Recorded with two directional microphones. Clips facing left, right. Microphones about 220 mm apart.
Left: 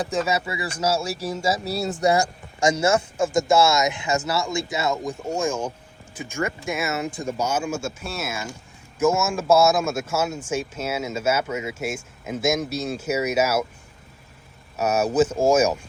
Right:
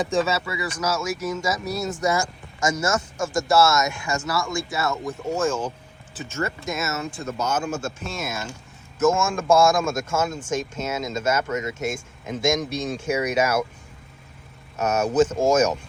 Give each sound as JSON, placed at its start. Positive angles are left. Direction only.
{"t": 0.1, "sound": "speech", "side_deg": 15}
{"t": 3.5, "sound": "speech", "side_deg": 15}
{"t": 14.8, "sound": "speech", "side_deg": 10}